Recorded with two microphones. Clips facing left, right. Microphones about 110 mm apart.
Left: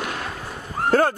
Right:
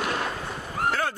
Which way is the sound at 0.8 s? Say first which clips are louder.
Left 2 dB; 30° left (ahead or behind).